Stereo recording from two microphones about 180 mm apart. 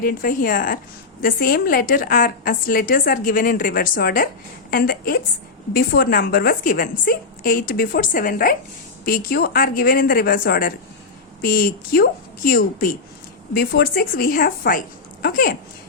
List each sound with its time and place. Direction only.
0.0 s a woman's voice: 50° left (ahead or behind)